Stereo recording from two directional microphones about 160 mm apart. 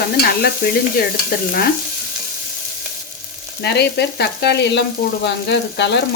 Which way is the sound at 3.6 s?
90° left.